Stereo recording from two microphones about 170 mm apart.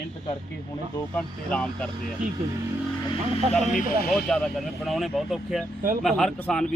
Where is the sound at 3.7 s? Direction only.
55° left (ahead or behind).